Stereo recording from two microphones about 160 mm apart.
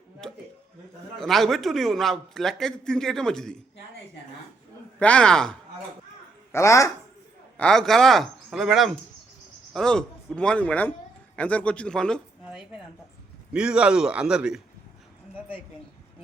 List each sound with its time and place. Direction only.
0.2 s a man's voice: 5° left (ahead or behind)
4.9 s a man's voice: 10° left (ahead or behind)
6.5 s speech: 20° left (ahead or behind)
7.5 s a man's voice: 5° left (ahead or behind)